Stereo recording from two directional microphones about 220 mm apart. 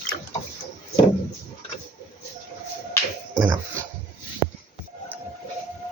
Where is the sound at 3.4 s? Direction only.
20° right (ahead or behind).